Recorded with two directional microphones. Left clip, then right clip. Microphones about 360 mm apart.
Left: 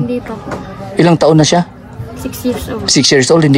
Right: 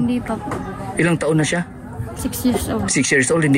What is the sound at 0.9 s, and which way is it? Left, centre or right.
Speech, centre.